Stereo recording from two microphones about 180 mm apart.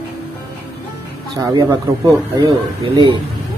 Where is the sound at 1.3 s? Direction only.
25° right (ahead or behind).